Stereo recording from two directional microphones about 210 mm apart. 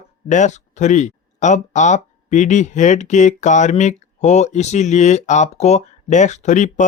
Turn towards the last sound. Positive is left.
turn(degrees=35)  # may be behind; listen again after turning